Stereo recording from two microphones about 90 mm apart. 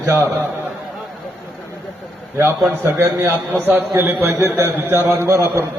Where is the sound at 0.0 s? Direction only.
25° right (ahead or behind).